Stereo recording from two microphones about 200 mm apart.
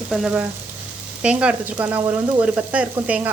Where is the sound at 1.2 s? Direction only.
5° right (ahead or behind).